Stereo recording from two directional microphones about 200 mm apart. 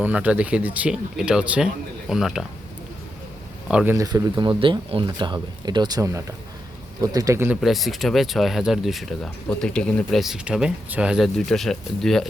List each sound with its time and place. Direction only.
0.0 s speech: 5° right (ahead or behind)
3.7 s speech: 5° right (ahead or behind)
3.9 s speech: 20° right (ahead or behind); by 12.2 s centre (ahead or behind)